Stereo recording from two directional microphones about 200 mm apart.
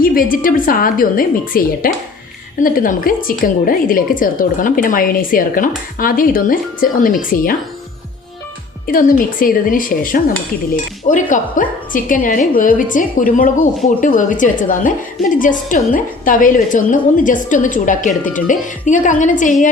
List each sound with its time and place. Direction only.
0.0 s a woman's voice: 45° left (ahead or behind)
8.9 s a woman's voice: 45° left (ahead or behind)